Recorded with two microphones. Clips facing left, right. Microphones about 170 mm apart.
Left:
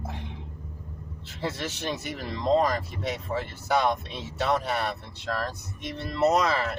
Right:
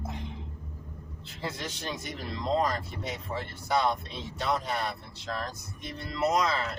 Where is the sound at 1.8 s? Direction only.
75° left (ahead or behind).